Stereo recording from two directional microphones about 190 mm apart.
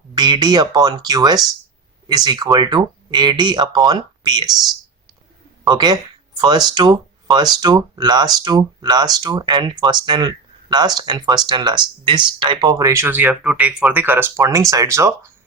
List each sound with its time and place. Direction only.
0.1 s speech: 20° right (ahead or behind)
5.6 s speech: 20° right (ahead or behind)